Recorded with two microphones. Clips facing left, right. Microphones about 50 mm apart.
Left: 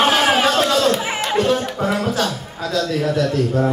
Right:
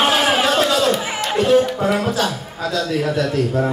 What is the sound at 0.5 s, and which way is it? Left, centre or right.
Speech, centre.